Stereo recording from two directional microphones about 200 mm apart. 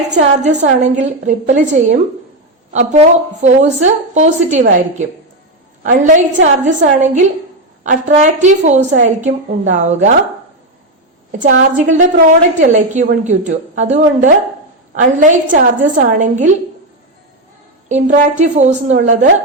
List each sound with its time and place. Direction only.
0.1 s a woman's voice: 35° right (ahead or behind)
11.3 s a woman's voice: 40° right (ahead or behind)
17.8 s a woman's voice: 35° right (ahead or behind)